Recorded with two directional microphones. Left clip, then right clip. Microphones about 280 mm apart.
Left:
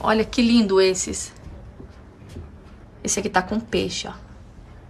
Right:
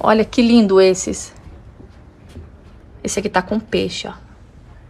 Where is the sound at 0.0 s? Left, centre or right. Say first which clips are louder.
Right 6 dB; centre.